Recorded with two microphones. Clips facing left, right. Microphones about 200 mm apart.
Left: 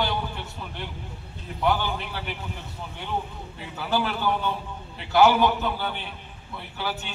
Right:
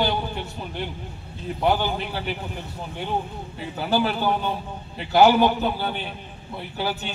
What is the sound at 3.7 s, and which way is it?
Speech, 35° right (ahead or behind).